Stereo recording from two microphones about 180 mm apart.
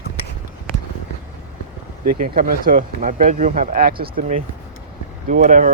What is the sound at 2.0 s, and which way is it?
Speech, 50° right (ahead or behind).